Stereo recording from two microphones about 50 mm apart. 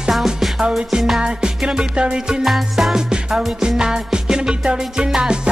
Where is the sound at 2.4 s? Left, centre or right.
Centre.